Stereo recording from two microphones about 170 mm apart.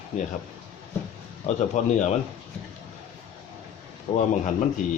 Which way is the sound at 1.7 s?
45° left (ahead or behind).